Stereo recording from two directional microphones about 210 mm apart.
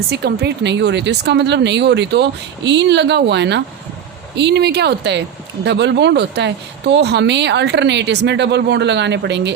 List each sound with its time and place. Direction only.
0.1 s speech: 50° right (ahead or behind)